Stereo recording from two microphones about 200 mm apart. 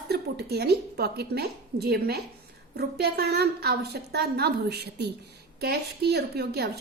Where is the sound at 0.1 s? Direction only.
55° right (ahead or behind).